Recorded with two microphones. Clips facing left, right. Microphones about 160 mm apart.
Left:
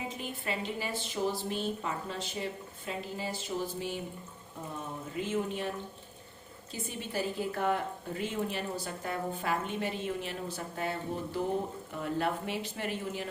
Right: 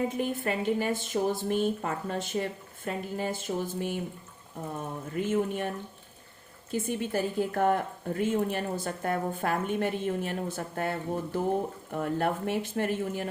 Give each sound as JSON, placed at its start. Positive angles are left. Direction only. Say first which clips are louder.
{"t": 0.2, "sound": "a woman's voice", "louder": "right 7 dB", "side_deg": -50}
{"t": 5.1, "sound": "a woman's voice", "louder": "right 5 dB", "side_deg": -50}
{"t": 6.7, "sound": "a woman's voice", "louder": "right 9 dB", "side_deg": -50}